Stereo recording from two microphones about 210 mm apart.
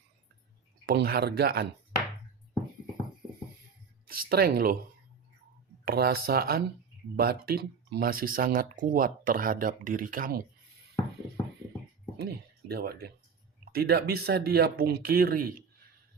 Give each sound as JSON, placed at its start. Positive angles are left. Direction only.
{"t": 0.9, "sound": "speech", "side_deg": -45}
{"t": 4.0, "sound": "speech", "side_deg": -45}
{"t": 5.8, "sound": "speech", "side_deg": -45}
{"t": 12.1, "sound": "speech", "side_deg": -50}